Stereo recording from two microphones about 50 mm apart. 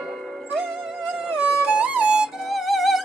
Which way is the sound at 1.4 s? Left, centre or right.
Right.